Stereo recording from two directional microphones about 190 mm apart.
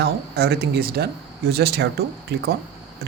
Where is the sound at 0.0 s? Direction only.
60° right (ahead or behind).